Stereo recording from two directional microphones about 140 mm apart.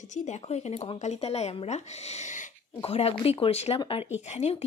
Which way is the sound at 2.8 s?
45° left (ahead or behind).